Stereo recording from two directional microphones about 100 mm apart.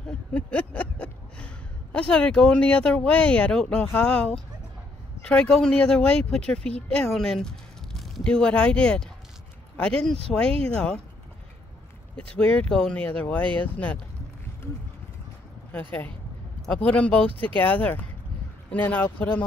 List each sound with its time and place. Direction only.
0.3 s speech: 10° left (ahead or behind)
12.4 s speech: 10° left (ahead or behind)
15.7 s speech: 15° left (ahead or behind)